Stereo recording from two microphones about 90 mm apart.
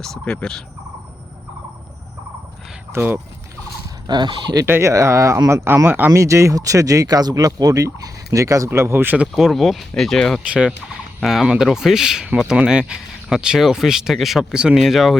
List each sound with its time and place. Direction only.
0.0 s speech: 5° left (ahead or behind)
2.9 s speech: 25° right (ahead or behind)
4.0 s speech: 55° right (ahead or behind)
4.6 s speech: 30° right (ahead or behind)
6.1 s speech: 35° right (ahead or behind)
9.2 s speech: centre (ahead or behind)